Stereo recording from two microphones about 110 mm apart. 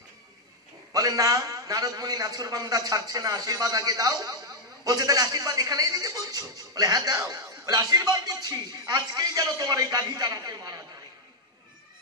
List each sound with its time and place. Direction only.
0.9 s a man's voice: 35° right (ahead or behind)